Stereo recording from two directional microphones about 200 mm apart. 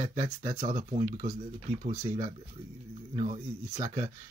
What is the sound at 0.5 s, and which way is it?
Speech, 25° right (ahead or behind).